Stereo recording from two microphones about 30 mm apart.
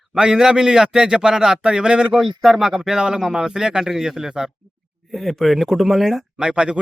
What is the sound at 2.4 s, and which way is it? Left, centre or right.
Speech, centre.